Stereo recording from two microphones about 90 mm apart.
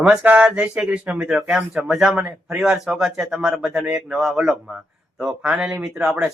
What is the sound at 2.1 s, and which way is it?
Speech, 20° right (ahead or behind).